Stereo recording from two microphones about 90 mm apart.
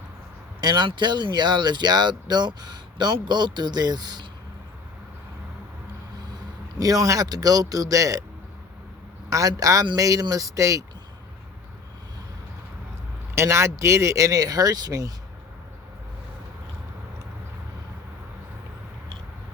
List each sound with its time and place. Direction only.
0.6 s speech: 50° right (ahead or behind)
6.7 s speech: 40° right (ahead or behind)
9.3 s speech: 40° right (ahead or behind)
13.3 s speech: 30° right (ahead or behind)